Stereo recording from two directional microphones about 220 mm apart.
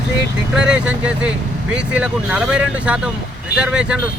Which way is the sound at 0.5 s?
5° right (ahead or behind).